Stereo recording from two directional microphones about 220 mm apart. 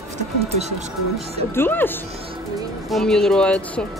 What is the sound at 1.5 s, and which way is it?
Speech, 10° left (ahead or behind).